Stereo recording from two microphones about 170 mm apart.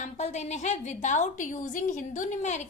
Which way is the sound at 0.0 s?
40° left (ahead or behind).